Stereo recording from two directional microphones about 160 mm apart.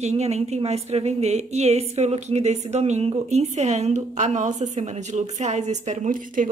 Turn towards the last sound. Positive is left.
turn(degrees=-55)  # may be behind; listen again after turning